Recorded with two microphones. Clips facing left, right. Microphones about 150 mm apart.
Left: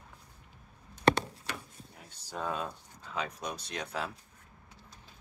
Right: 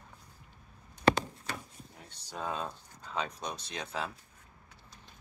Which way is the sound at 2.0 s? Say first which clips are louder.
Left 2 dB; 5° left (ahead or behind).